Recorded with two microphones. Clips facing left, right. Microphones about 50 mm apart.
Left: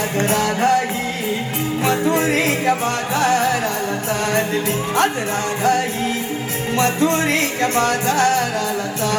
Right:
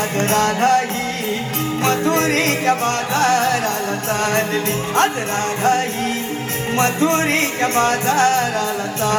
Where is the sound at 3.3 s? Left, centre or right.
Right.